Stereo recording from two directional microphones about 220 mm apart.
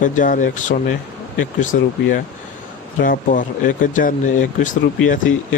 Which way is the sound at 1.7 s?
50° left (ahead or behind).